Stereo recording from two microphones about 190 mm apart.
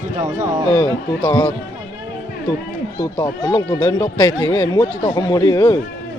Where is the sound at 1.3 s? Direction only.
20° left (ahead or behind).